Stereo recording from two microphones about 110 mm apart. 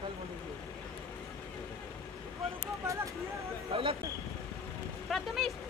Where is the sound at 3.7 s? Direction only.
60° right (ahead or behind).